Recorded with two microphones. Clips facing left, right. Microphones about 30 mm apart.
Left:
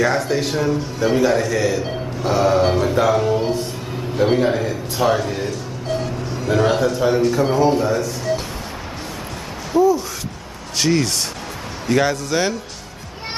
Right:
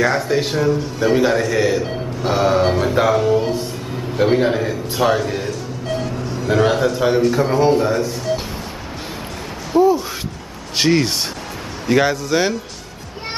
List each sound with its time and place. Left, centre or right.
0.0 s a man's voice: centre
4.9 s music: centre
7.2 s a man's voice: centre
7.8 s speech: right
9.7 s speech: right
11.9 s a man's voice: centre